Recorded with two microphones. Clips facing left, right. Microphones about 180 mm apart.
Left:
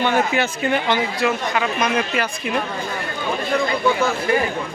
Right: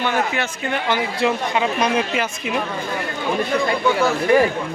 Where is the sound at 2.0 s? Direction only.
15° right (ahead or behind).